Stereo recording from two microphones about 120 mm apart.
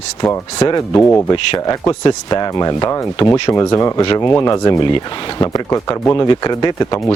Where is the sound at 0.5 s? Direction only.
35° left (ahead or behind).